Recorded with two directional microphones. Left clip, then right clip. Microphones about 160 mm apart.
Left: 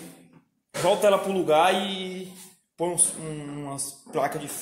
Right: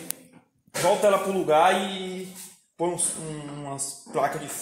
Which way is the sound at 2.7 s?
15° left (ahead or behind).